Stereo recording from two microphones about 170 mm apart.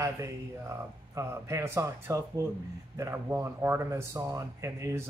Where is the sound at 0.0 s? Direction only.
20° right (ahead or behind).